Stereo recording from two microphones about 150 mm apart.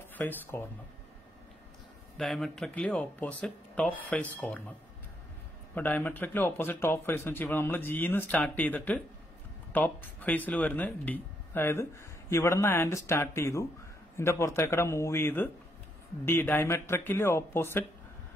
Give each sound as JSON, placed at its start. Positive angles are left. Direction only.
{"t": 0.1, "sound": "speech", "side_deg": 15}
{"t": 2.1, "sound": "speech", "side_deg": 0}
{"t": 5.8, "sound": "speech", "side_deg": 10}